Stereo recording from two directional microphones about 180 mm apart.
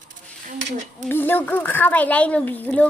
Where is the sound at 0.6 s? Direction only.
40° right (ahead or behind).